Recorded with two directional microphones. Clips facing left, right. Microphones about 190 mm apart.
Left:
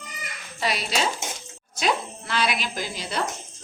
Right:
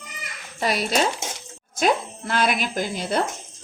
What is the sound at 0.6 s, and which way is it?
Speech, 50° right (ahead or behind).